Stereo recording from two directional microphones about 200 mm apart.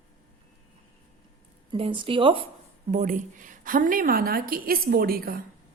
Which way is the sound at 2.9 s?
40° right (ahead or behind).